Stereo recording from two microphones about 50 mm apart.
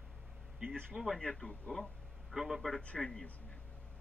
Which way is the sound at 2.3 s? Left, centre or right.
Centre.